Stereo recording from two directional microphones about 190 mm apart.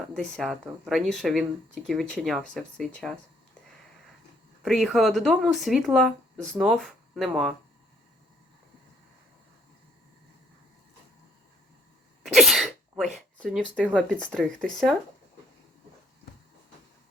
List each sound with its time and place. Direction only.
0.1 s speech: 5° left (ahead or behind)
4.6 s speech: centre (ahead or behind)
12.2 s sneeze: centre (ahead or behind)
13.1 s speech: centre (ahead or behind)